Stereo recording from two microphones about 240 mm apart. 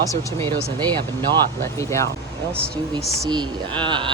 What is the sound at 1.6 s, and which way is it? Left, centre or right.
Speech, centre.